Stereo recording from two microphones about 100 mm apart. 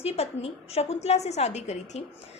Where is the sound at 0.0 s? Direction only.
90° left.